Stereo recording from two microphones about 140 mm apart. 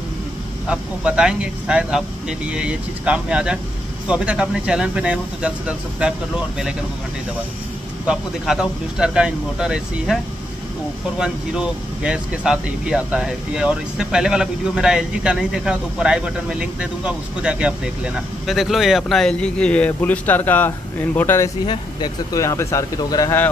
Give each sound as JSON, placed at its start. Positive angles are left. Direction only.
{"t": 0.7, "sound": "speech", "side_deg": -5}
{"t": 8.1, "sound": "speech", "side_deg": -5}
{"t": 21.6, "sound": "speech", "side_deg": 30}